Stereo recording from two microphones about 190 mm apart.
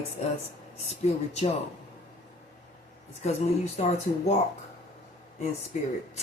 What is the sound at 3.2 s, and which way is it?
Speech, 35° left (ahead or behind).